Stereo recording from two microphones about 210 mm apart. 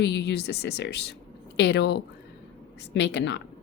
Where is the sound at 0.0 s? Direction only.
55° left (ahead or behind).